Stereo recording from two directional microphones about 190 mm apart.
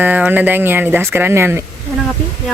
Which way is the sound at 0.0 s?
10° right (ahead or behind).